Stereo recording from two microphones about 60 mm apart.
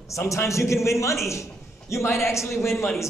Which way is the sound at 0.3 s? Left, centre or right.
Left.